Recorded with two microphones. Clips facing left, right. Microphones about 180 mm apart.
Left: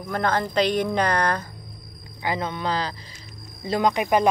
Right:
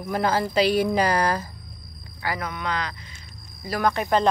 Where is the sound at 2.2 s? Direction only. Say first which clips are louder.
Left 3 dB; 25° left (ahead or behind).